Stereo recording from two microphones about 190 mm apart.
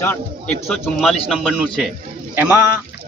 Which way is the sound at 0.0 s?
10° left (ahead or behind).